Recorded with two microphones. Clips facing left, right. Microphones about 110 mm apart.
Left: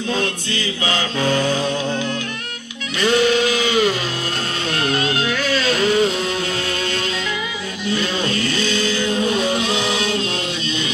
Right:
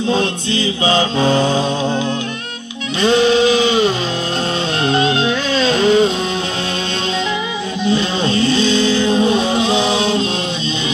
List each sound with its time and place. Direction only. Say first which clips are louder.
0.1 s music: right 4 dB; 25° right (ahead or behind)
7.8 s music: right 5 dB; 25° right (ahead or behind)